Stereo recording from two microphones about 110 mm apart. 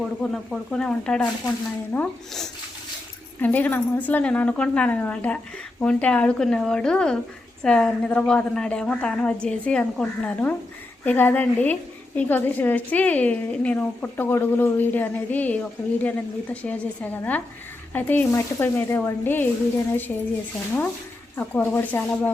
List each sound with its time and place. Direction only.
0.0 s a woman's voice: 5° left (ahead or behind)
3.4 s a woman's voice: 15° left (ahead or behind)
21.3 s a woman's voice: 15° left (ahead or behind)